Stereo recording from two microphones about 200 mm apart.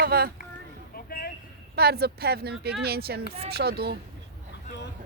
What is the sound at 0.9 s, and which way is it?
Vehicle, 50° left (ahead or behind).